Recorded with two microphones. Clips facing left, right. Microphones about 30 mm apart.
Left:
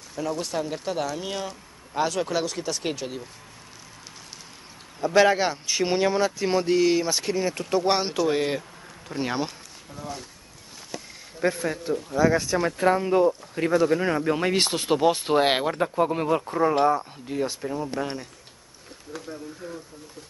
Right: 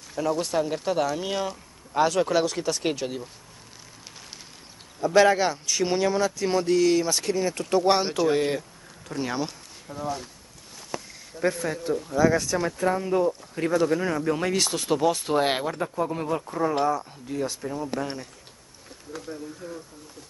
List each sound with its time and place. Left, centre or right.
0.1 s speech: centre
5.0 s speech: centre
9.8 s speech: centre
11.3 s speech: centre
12.7 s speech: left
13.3 s speech: centre
14.0 s speech: left
16.8 s speech: left
17.3 s speech: centre